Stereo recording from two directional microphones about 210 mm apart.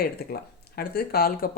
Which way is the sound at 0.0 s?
45° left (ahead or behind).